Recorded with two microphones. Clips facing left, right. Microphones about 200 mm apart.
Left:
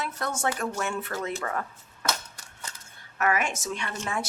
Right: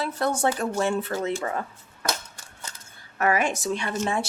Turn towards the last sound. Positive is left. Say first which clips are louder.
# right 5 dB
turn(degrees=-30)  # may be behind; listen again after turning